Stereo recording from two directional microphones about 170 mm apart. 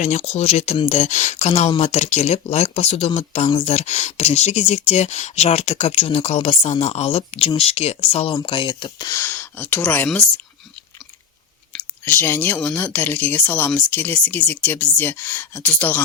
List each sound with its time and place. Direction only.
0.0 s speech: 40° left (ahead or behind); by 10.4 s 5° left (ahead or behind)
12.0 s speech: 10° left (ahead or behind)